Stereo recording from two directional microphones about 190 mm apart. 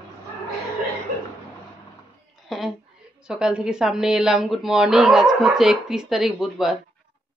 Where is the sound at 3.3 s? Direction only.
5° right (ahead or behind).